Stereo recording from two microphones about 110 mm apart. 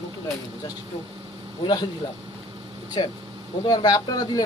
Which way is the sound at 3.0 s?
45° left (ahead or behind).